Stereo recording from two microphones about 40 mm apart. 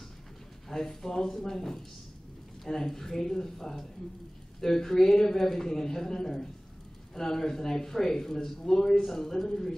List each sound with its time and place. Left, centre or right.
0.7 s speech: centre